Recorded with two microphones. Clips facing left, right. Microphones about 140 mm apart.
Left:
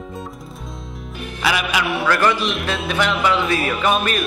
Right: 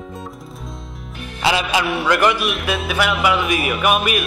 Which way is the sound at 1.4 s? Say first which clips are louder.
Right 2 dB; 25° right (ahead or behind).